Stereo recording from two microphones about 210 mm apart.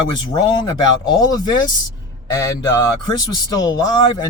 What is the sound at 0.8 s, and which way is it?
Speech, 20° left (ahead or behind).